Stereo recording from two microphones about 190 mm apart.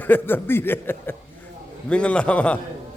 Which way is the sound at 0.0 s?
10° left (ahead or behind).